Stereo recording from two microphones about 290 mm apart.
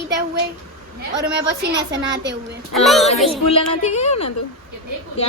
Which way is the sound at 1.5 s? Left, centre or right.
Right.